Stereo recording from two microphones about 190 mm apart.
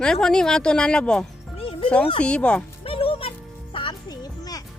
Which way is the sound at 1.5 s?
30° left (ahead or behind).